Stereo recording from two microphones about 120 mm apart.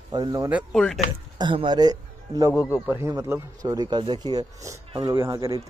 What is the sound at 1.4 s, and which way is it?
A man's voice, 40° right (ahead or behind).